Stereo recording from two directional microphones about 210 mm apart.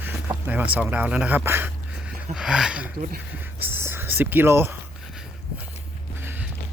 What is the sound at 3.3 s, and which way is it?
Whispering, 10° right (ahead or behind).